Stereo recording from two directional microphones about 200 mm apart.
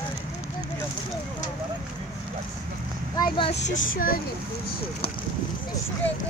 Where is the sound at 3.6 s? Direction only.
45° left (ahead or behind).